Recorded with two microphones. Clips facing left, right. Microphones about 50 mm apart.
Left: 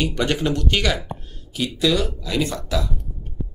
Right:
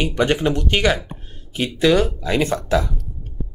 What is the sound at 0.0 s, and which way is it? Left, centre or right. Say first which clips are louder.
Speech: right 3 dB; right.